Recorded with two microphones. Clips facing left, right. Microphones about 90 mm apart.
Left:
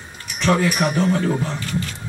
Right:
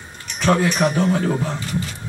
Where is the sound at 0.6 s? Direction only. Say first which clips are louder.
Right 1 dB; 5° left (ahead or behind).